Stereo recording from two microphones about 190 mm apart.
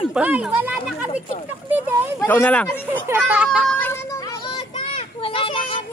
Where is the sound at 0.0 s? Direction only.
5° right (ahead or behind).